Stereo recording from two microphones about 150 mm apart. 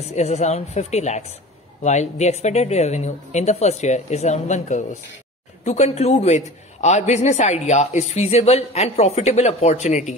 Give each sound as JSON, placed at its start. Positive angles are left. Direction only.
{"t": 0.0, "sound": "a man's voice", "side_deg": 45}